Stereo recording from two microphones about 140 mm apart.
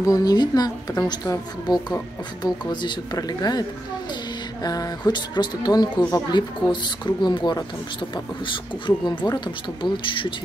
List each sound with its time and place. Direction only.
0.0 s speech: 25° left (ahead or behind)
4.6 s speech: 30° left (ahead or behind)